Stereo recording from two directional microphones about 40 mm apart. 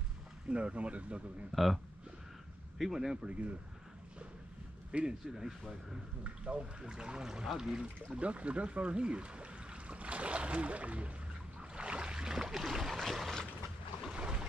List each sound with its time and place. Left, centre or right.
0.5 s speech: right
1.5 s speech: centre
2.8 s speech: centre
3.3 s speech: right
4.9 s speech: right
5.3 s speech: centre
6.2 s speech: right
6.8 s speech: centre
8.2 s speech: right
11.7 s boat: right; by 12.9 s centre
12.9 s a sound: centre
14.0 s boat: right